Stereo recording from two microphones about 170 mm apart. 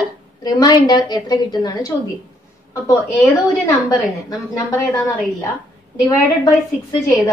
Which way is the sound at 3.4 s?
20° left (ahead or behind).